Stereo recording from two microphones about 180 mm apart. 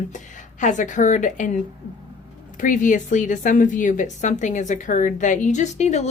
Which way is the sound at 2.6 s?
45° left (ahead or behind).